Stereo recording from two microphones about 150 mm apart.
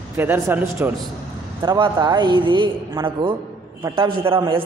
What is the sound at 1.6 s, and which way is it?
A man's voice, 30° right (ahead or behind).